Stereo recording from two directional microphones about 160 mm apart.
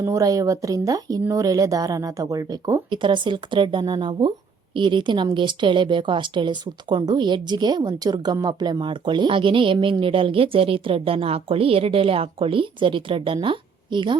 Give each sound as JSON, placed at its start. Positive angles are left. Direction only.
{"t": 0.0, "sound": "a woman's voice", "side_deg": -20}